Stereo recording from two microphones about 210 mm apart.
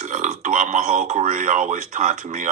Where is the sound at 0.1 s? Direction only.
40° right (ahead or behind).